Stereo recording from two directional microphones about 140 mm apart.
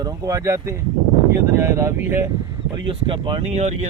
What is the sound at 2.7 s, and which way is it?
Speech, 35° right (ahead or behind).